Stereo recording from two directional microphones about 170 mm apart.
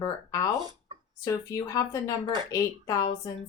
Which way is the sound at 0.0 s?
20° left (ahead or behind).